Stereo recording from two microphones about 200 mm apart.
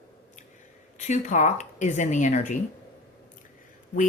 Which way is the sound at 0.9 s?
35° left (ahead or behind).